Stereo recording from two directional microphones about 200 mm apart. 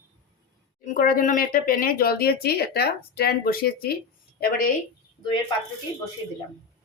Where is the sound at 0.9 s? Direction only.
45° left (ahead or behind).